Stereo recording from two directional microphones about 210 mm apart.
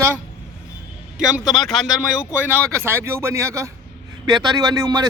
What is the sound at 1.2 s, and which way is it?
Speech, centre (ahead or behind).